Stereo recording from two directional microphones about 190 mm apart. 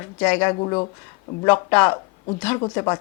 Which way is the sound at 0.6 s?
25° left (ahead or behind).